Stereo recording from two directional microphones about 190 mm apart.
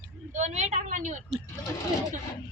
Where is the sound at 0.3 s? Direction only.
40° right (ahead or behind).